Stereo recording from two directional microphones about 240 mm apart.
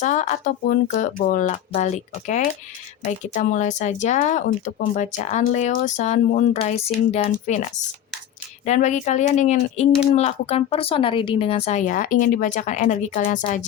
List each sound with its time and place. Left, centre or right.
0.0 s speech: left
8.6 s speech: left